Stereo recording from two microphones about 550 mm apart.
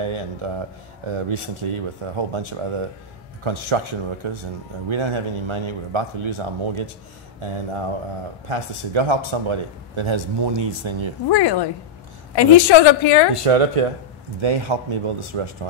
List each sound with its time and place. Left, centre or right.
0.0 s speech: right
11.2 s a woman's voice: left
13.4 s speech: right
14.4 s speech: right